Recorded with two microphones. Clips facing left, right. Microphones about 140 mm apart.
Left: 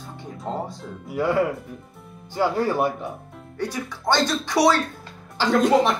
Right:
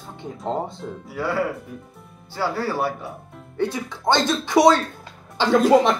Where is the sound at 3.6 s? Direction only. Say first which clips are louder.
Right 4 dB; 20° right (ahead or behind).